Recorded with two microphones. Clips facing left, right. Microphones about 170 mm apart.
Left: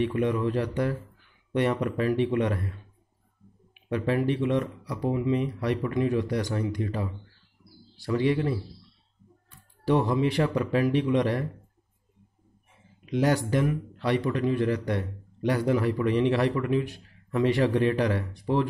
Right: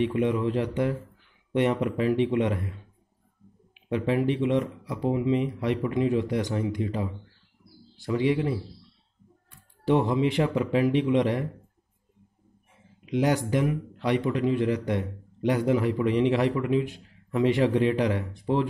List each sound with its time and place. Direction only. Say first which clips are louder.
0.0 s a man's voice: right 1 dB; 20° right (ahead or behind)
3.9 s a man's voice: right 1 dB; 20° right (ahead or behind)
9.8 s speech: right 1 dB; 20° right (ahead or behind)
13.0 s a man's voice: even; 15° right (ahead or behind)